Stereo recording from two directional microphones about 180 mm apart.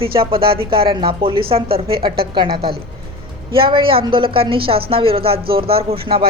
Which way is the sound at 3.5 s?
30° right (ahead or behind).